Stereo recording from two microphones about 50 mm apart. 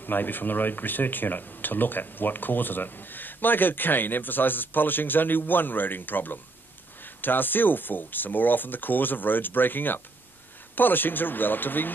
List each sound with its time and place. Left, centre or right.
0.0 s speech: left